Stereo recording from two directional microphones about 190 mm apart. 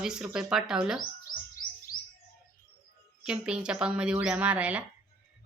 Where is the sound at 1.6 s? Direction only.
45° left (ahead or behind).